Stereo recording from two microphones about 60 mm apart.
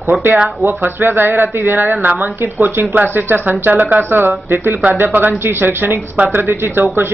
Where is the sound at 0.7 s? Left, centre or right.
Right.